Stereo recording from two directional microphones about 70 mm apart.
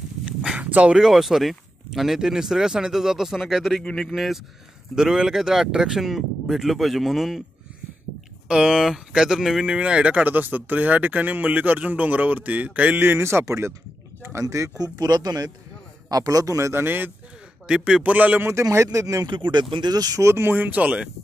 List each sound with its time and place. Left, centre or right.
0.6 s dog: right
0.9 s speech: centre
3.8 s speech: centre
4.1 s speech: centre
8.5 s speech: centre
9.7 s a man's voice: centre; by 14.7 s right
14.8 s a man's voice: right
16.8 s speech: right
17.6 s speech: centre
18.5 s a man's voice: right
19.2 s speech: right
19.9 s speech: right
20.2 s speech: right; by 21.1 s centre